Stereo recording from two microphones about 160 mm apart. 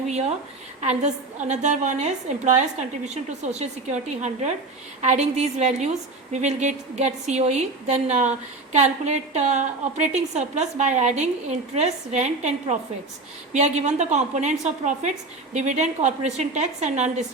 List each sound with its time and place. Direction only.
0.1 s a woman's voice: 45° right (ahead or behind)